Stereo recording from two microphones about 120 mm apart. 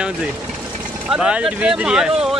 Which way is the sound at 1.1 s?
10° right (ahead or behind).